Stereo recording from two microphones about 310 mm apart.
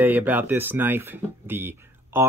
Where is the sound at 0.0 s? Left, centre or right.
Centre.